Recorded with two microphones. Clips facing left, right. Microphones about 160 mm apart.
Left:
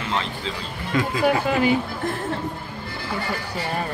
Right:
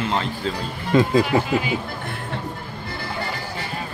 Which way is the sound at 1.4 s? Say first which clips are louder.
Left 3 dB; 50° left (ahead or behind).